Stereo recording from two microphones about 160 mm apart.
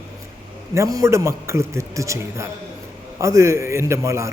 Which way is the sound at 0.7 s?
20° right (ahead or behind).